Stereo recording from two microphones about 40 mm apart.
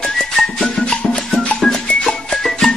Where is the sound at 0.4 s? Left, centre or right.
Centre.